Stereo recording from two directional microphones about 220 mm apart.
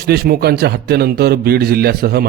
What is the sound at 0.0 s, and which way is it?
A man's voice, 45° right (ahead or behind).